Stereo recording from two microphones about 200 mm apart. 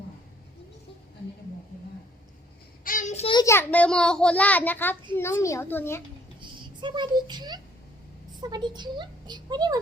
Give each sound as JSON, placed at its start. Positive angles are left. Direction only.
{"t": 2.8, "sound": "child singing", "side_deg": 40}
{"t": 3.3, "sound": "a child's voice", "side_deg": 15}
{"t": 6.6, "sound": "a woman's voice", "side_deg": -25}